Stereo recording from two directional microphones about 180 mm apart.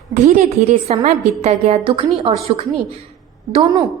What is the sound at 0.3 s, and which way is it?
A woman's voice, 45° right (ahead or behind).